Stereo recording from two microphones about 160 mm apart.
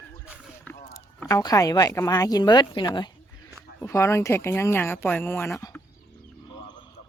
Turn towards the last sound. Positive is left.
turn(degrees=20)  # may be behind; listen again after turning